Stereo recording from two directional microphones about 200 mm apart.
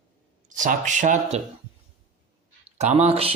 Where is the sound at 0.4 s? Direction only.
40° right (ahead or behind).